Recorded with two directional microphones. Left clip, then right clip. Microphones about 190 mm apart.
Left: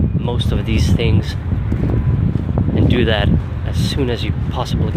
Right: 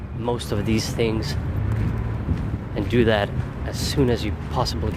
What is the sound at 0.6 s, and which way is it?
Speech, 15° right (ahead or behind).